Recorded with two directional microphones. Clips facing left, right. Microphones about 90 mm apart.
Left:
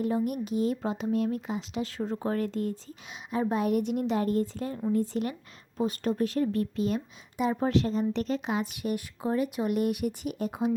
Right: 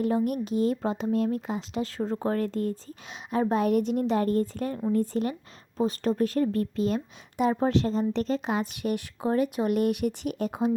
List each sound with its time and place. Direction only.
0.4 s speech: 45° right (ahead or behind)
5.2 s speech: 30° right (ahead or behind); by 10.6 s 55° right (ahead or behind)